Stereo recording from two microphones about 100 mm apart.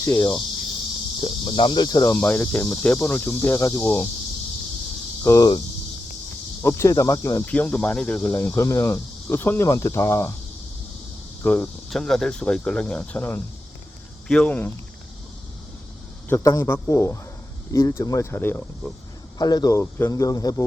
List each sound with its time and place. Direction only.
0.0 s speech: 35° left (ahead or behind)
1.2 s speech: 55° left (ahead or behind); by 2.1 s 35° left (ahead or behind)
2.1 s speech: 20° left (ahead or behind)
5.2 s cricket: 35° left (ahead or behind)
6.6 s speech: 25° left (ahead or behind)
7.4 s speech: 15° left (ahead or behind)
8.2 s speech: 25° left (ahead or behind)
11.4 s speech: 20° left (ahead or behind)
11.9 s speech: 5° left (ahead or behind)
16.3 s speech: 30° left (ahead or behind)
19.4 s speech: 40° left (ahead or behind)
19.8 s speech: 25° left (ahead or behind)
20.1 s speech: 35° left (ahead or behind)